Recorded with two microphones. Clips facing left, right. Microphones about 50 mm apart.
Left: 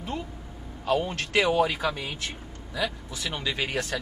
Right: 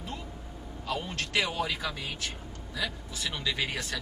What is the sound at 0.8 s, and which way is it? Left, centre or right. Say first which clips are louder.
Speech: left 8 dB; left.